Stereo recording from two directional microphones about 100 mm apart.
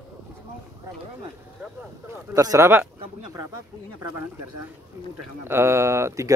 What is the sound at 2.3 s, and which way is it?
Speech, 35° right (ahead or behind).